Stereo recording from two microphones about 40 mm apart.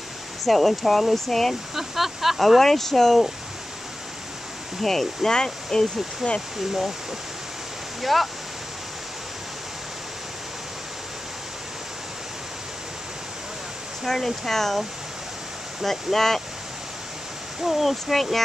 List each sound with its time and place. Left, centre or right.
0.5 s speech: centre
1.8 s speech: centre
4.8 s speech: centre
8.0 s speech: centre
14.0 s speech: centre
15.8 s speech: centre
17.6 s speech: centre